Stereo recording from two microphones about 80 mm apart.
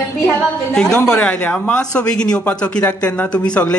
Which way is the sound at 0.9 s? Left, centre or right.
Centre.